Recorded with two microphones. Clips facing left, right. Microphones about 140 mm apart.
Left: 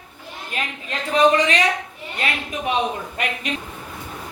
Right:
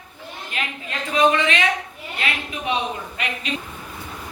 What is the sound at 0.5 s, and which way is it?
A woman's voice, 40° left (ahead or behind).